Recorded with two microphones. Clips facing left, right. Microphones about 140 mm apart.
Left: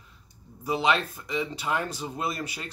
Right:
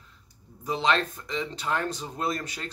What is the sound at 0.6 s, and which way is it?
Speech, 10° left (ahead or behind).